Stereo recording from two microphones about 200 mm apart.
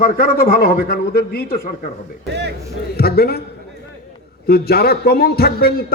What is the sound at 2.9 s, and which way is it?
Speech, 50° left (ahead or behind).